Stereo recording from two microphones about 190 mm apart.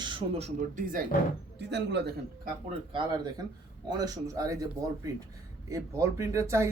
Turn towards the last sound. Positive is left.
turn(degrees=-15)  # may be behind; listen again after turning